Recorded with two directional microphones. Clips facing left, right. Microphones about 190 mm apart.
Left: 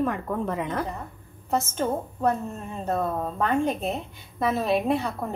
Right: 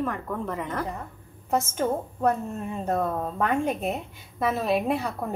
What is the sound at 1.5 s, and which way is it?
A woman's voice, 10° right (ahead or behind).